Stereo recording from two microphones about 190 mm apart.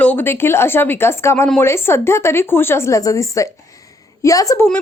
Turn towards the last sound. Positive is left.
turn(degrees=15)  # may be behind; listen again after turning